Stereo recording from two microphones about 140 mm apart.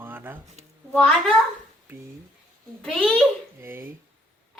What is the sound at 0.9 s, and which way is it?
Speech, centre (ahead or behind).